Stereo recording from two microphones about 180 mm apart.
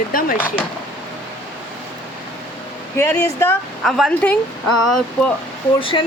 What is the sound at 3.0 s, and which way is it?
Speech, 15° left (ahead or behind).